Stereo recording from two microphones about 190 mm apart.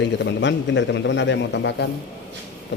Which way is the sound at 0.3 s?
70° left (ahead or behind).